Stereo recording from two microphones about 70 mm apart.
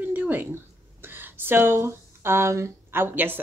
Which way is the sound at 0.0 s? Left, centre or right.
Right.